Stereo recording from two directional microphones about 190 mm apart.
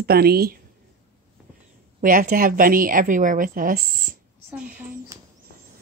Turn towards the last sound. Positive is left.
turn(degrees=-10)  # may be behind; listen again after turning